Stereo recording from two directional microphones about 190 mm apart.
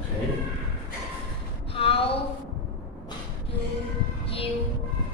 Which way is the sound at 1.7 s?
30° left (ahead or behind).